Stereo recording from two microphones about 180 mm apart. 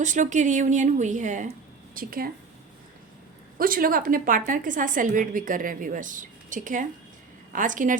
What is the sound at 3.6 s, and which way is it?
A woman's voice, 50° right (ahead or behind).